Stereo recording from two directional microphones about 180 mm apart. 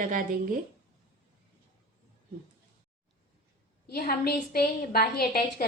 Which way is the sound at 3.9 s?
60° left (ahead or behind).